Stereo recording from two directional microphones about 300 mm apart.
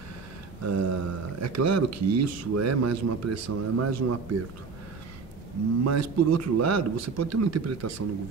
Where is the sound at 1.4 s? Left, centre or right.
Right.